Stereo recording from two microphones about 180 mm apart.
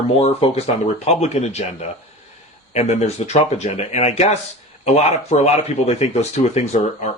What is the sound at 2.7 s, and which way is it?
Speech, 35° left (ahead or behind).